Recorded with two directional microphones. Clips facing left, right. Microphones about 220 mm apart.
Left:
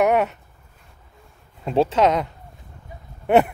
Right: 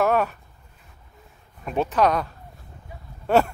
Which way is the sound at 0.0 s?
20° left (ahead or behind).